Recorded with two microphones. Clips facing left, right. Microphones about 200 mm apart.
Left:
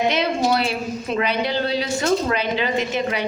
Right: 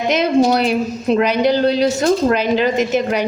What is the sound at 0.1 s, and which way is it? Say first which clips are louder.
A woman's voice: right 6 dB; 45° right (ahead or behind).